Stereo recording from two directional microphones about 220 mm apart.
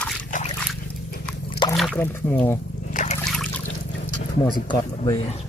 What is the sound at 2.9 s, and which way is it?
Trickle, 30° left (ahead or behind).